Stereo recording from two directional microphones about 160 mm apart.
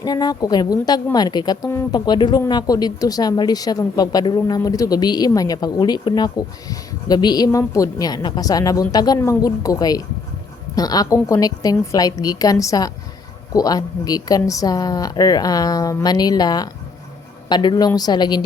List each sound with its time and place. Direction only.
0.0 s a woman's voice: 25° left (ahead or behind)
1.7 s speech: 15° left (ahead or behind)
2.0 s a woman's voice: 25° left (ahead or behind)